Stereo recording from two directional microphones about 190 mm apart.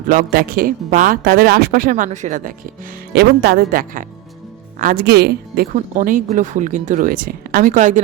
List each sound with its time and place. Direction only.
0.1 s speech: 50° right (ahead or behind)
3.1 s speech: 55° right (ahead or behind)
5.7 s speech: 40° right (ahead or behind)